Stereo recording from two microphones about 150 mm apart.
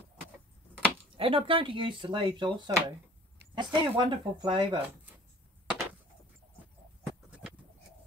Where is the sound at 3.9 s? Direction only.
35° right (ahead or behind).